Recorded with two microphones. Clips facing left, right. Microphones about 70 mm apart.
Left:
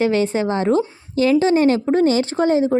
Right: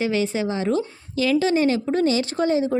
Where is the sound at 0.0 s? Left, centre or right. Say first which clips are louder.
Left 5 dB; left.